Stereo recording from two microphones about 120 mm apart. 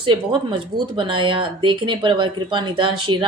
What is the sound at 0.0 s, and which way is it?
Speech, 40° right (ahead or behind).